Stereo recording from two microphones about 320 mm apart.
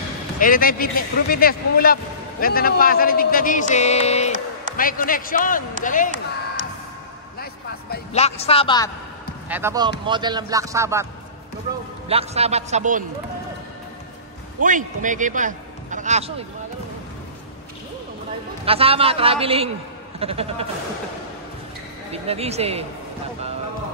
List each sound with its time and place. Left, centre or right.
0.4 s speech: left
7.9 s speech: centre
9.5 s speech: centre
12.1 s a man's voice: centre
14.6 s a man's voice: right
18.7 s speech: centre
22.1 s a man's voice: centre